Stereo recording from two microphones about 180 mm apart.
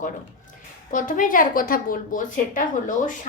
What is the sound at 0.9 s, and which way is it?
A woman's voice, 50° left (ahead or behind).